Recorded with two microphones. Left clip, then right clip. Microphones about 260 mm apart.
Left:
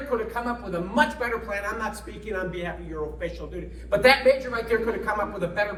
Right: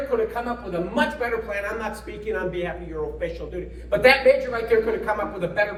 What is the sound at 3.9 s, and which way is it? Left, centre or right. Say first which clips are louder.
A man's voice: right 2 dB; centre.